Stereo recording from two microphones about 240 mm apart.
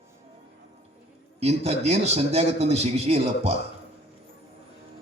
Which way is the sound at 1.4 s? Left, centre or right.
Right.